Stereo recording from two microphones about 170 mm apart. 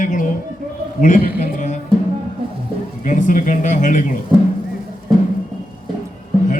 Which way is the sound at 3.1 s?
50° left (ahead or behind).